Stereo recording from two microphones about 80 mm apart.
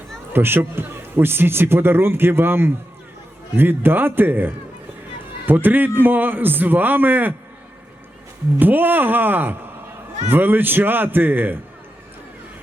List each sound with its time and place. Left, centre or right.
0.3 s a man's voice: right
8.5 s a man's voice: right